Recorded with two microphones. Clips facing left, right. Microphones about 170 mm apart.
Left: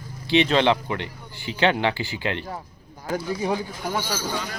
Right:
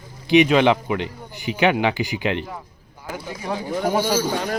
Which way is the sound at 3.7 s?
45° right (ahead or behind).